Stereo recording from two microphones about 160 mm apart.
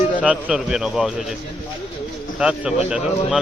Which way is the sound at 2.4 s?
5° right (ahead or behind).